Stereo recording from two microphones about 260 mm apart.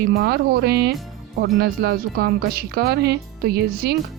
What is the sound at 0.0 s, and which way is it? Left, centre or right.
Speech, right.